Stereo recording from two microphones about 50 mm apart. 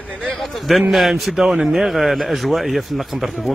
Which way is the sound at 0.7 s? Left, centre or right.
Centre.